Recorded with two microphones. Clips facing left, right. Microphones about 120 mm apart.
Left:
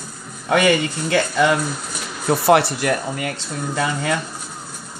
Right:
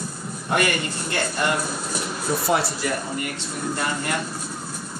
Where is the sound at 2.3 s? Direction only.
65° left (ahead or behind).